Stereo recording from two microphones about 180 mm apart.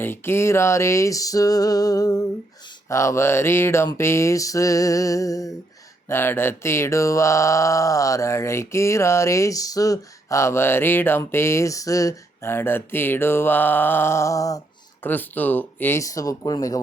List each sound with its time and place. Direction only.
0.0 s music: 15° left (ahead or behind)
2.9 s speech: 15° left (ahead or behind)